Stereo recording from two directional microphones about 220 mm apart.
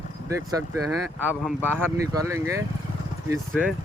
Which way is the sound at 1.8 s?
15° right (ahead or behind).